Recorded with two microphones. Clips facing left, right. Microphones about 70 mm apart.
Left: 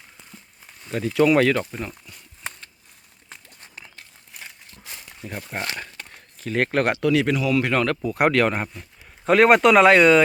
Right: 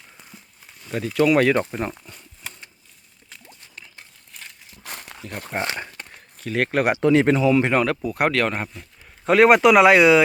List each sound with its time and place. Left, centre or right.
0.9 s speech: centre
1.5 s speech: centre
1.8 s speech: right
4.3 s crumpling: centre
4.8 s crumpling: right
5.5 s speech: right
6.1 s a sound: centre
6.8 s speech: right
7.8 s speech: centre